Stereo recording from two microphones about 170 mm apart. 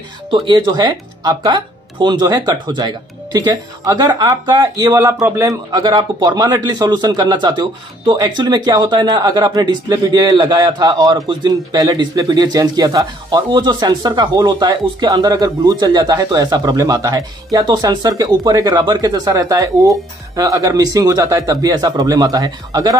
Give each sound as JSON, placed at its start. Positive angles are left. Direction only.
{"t": 0.3, "sound": "speech", "side_deg": -30}